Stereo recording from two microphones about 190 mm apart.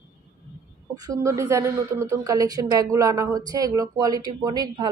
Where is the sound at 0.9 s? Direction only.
20° right (ahead or behind).